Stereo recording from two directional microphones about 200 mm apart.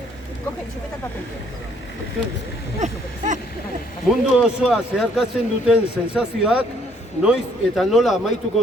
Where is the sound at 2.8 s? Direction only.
35° right (ahead or behind).